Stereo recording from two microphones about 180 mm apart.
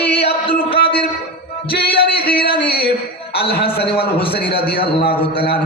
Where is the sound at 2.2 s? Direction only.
55° left (ahead or behind).